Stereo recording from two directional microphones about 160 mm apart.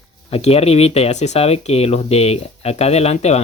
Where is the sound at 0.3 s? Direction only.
40° left (ahead or behind).